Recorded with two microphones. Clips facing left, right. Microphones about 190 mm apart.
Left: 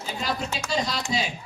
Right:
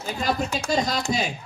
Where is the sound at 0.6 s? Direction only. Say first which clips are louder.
Right 4 dB; 40° right (ahead or behind).